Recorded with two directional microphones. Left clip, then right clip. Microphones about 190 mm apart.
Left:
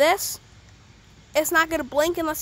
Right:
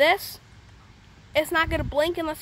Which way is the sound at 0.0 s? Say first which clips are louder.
Left 1 dB; 25° left (ahead or behind).